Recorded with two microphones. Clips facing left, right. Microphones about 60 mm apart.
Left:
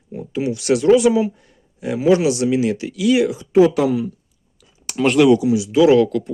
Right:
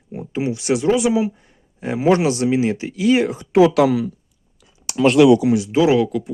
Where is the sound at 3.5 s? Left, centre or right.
Right.